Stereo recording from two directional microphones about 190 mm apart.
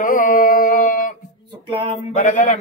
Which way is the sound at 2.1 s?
45° left (ahead or behind).